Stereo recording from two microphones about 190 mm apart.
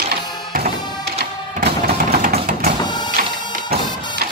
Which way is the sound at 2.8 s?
20° left (ahead or behind).